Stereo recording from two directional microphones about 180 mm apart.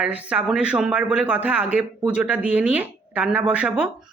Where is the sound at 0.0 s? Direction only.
5° right (ahead or behind).